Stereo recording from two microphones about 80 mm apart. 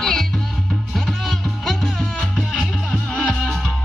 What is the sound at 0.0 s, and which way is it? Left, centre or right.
Music, centre.